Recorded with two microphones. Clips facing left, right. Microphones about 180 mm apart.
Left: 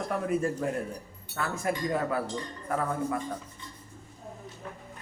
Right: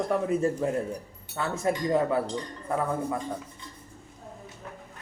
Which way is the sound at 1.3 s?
20° right (ahead or behind).